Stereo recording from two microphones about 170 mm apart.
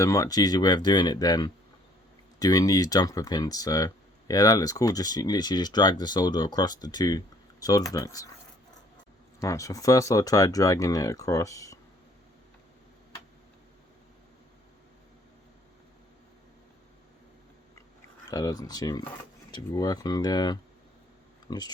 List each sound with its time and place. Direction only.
0.0 s speech: 20° left (ahead or behind)
9.4 s speech: 20° left (ahead or behind)
18.3 s speech: 20° left (ahead or behind)